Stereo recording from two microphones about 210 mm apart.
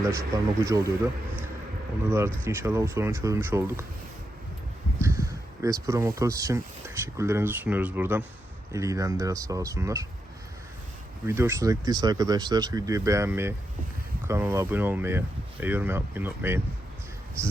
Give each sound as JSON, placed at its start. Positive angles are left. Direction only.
{"t": 0.0, "sound": "speech", "side_deg": -15}
{"t": 2.0, "sound": "speech", "side_deg": -10}
{"t": 4.9, "sound": "speech", "side_deg": -15}
{"t": 11.3, "sound": "speech", "side_deg": -10}